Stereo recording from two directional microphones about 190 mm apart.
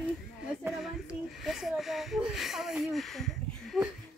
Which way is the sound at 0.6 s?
5° right (ahead or behind).